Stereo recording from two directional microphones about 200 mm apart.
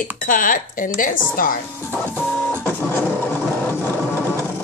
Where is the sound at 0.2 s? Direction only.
45° left (ahead or behind).